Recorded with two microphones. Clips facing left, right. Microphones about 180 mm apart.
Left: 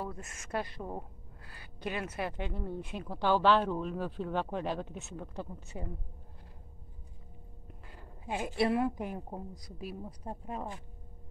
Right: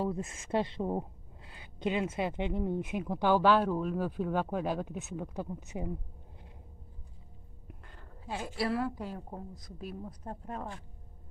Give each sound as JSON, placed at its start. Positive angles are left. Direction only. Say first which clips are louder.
{"t": 0.0, "sound": "speech", "louder": "right 7 dB", "side_deg": -25}
{"t": 7.9, "sound": "a woman's voice", "louder": "left 2 dB", "side_deg": 15}
{"t": 9.6, "sound": "speech", "louder": "even", "side_deg": 10}